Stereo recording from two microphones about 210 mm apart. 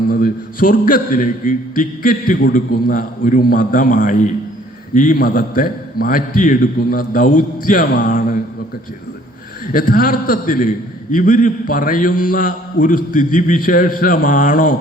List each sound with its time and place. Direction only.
0.1 s a man's voice: 40° left (ahead or behind)
9.7 s a man's voice: 40° left (ahead or behind)